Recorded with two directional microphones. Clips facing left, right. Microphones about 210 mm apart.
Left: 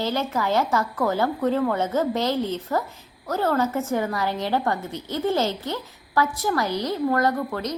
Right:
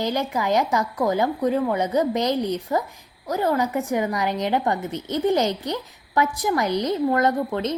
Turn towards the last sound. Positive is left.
turn(degrees=-25)  # may be behind; listen again after turning